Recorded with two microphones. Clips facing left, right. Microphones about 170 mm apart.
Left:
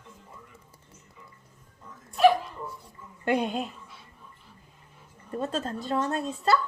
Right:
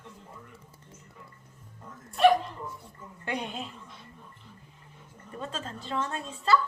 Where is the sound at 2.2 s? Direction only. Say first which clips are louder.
Left 1 dB; centre (ahead or behind).